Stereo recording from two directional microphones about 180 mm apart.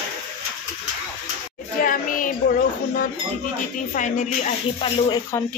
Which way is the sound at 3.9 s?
40° left (ahead or behind).